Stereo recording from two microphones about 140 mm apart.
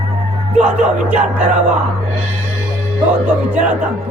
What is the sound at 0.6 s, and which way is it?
Speech, 10° right (ahead or behind).